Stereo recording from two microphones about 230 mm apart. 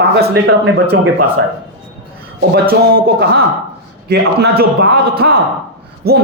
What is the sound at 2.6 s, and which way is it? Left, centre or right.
A man's voice, right.